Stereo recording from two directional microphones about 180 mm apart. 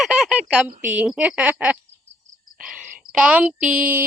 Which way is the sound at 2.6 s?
5° right (ahead or behind).